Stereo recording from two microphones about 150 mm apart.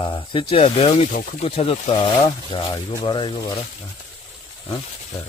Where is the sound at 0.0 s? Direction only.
35° left (ahead or behind).